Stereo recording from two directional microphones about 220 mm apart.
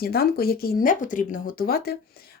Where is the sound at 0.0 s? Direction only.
45° left (ahead or behind).